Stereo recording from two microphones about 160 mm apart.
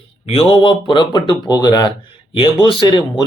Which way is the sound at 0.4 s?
30° left (ahead or behind).